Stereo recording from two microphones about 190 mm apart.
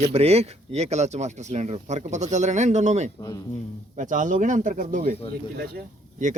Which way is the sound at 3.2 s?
20° left (ahead or behind).